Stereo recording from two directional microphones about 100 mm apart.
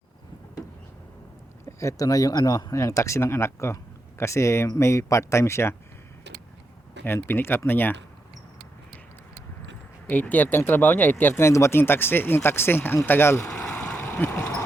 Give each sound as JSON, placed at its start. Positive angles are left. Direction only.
{"t": 1.6, "sound": "speech", "side_deg": 30}
{"t": 7.0, "sound": "speech", "side_deg": 20}
{"t": 10.1, "sound": "speech", "side_deg": 15}
{"t": 13.7, "sound": "a sound", "side_deg": 15}